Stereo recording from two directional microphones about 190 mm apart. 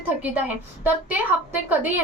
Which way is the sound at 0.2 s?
10° right (ahead or behind).